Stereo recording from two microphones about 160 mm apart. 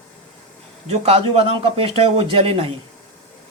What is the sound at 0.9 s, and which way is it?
A man's voice, 40° right (ahead or behind).